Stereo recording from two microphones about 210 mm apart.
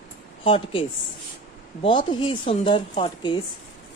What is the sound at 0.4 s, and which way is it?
A woman's voice, 25° left (ahead or behind).